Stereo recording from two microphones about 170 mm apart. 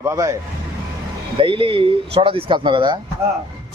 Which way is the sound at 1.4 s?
30° right (ahead or behind).